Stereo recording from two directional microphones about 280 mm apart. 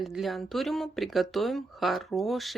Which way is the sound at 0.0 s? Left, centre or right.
Centre.